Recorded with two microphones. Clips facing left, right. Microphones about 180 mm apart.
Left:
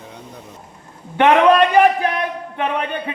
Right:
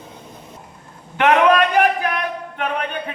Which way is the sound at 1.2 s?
30° left (ahead or behind).